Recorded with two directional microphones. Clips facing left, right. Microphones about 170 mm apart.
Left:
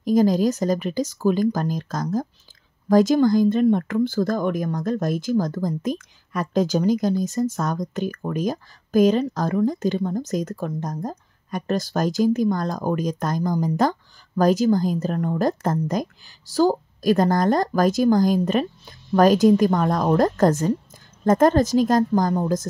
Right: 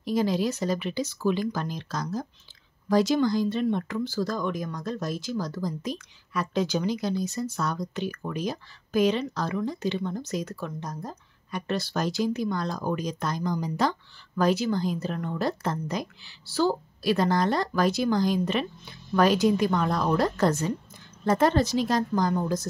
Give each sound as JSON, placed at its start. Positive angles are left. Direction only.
{"t": 0.0, "sound": "speech", "side_deg": 45}